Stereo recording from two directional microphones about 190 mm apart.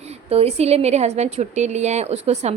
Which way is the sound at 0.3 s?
35° right (ahead or behind).